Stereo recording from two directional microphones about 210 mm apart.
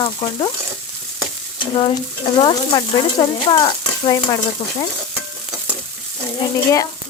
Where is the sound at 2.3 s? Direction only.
25° left (ahead or behind).